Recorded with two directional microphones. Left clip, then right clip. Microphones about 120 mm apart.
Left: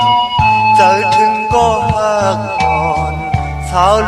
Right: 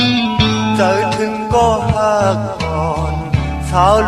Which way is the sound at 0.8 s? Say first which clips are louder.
Left 6 dB; 40° right (ahead or behind).